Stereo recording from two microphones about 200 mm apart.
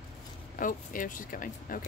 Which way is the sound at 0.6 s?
40° left (ahead or behind).